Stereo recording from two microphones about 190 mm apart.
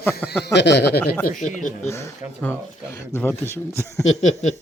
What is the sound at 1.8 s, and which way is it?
A man's voice, 15° left (ahead or behind).